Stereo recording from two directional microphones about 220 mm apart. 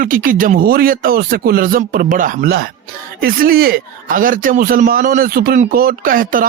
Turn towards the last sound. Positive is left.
turn(degrees=-40)  # may be behind; listen again after turning